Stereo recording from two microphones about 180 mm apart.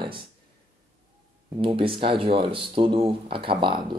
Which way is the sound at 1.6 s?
30° right (ahead or behind).